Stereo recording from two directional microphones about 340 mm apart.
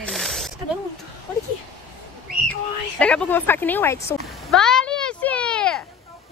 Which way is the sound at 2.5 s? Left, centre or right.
Centre.